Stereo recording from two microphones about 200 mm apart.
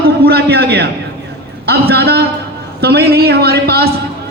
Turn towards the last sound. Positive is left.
turn(degrees=-50)  # may be behind; listen again after turning